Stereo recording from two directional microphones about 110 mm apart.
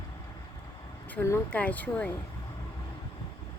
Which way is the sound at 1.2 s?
20° left (ahead or behind).